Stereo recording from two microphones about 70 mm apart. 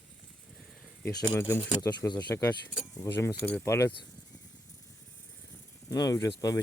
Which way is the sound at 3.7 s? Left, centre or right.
Left.